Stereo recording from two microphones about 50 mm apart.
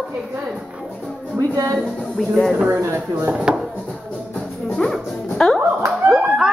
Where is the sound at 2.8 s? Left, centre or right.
Right.